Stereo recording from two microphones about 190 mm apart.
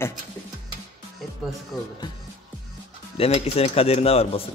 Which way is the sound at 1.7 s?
Centre (ahead or behind).